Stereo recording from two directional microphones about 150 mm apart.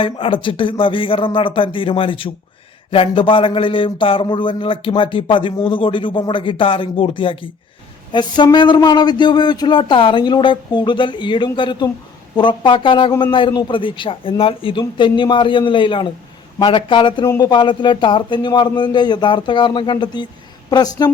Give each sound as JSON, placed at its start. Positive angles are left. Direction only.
{"t": 0.0, "sound": "a woman's voice", "side_deg": 35}